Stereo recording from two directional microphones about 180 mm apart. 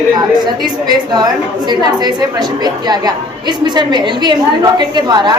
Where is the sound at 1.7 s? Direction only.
25° right (ahead or behind).